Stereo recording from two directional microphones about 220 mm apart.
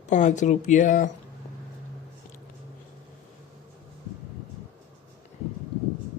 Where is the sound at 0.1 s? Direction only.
35° left (ahead or behind).